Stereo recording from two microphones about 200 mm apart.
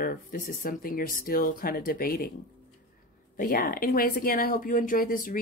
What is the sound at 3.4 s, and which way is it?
Speech, 45° left (ahead or behind).